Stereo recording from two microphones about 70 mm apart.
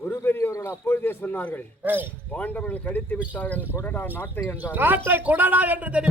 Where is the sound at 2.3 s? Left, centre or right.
Centre.